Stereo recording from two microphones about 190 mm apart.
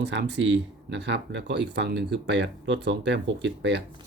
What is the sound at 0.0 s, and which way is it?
Speech, 65° right (ahead or behind).